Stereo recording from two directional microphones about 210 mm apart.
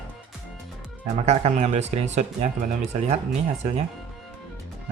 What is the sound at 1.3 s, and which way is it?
Speech, 35° right (ahead or behind).